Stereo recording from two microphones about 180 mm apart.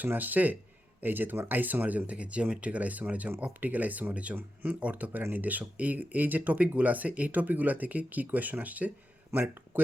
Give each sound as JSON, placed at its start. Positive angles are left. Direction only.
{"t": 0.0, "sound": "speech", "side_deg": -10}